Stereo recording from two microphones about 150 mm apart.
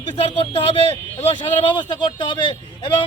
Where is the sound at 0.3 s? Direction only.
35° left (ahead or behind).